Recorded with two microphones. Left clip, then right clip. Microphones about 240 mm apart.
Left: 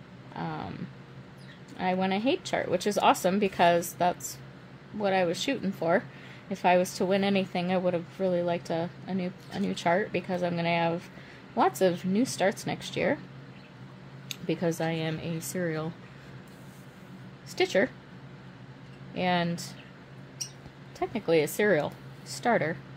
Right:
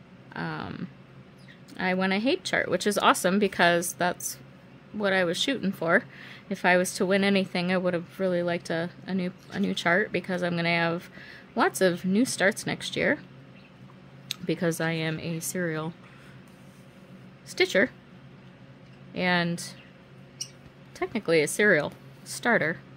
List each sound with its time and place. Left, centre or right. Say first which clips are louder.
0.4 s a sound: right 2 dB; right
1.8 s a woman's voice: right 2 dB; right
14.3 s a woman's voice: right 2 dB; right
17.5 s a woman's voice: right 2 dB; right
19.1 s a woman's voice: right 2 dB; right
21.0 s a woman's voice: right 1 dB; right